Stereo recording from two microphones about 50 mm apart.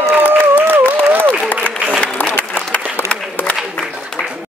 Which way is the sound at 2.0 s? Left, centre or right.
Left.